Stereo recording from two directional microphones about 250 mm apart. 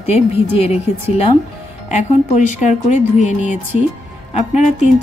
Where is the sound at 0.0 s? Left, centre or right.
Left.